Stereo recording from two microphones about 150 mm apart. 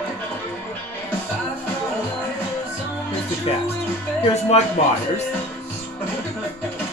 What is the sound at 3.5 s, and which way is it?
Speech, 45° left (ahead or behind).